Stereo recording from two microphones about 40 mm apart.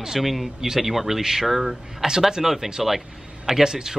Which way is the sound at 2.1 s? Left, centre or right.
Centre.